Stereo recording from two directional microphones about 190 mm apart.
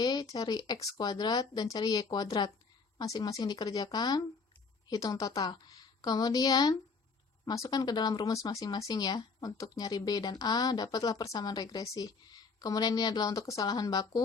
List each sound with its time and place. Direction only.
0.0 s speech: 20° left (ahead or behind)